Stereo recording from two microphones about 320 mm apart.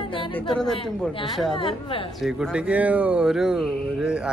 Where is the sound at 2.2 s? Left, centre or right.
Centre.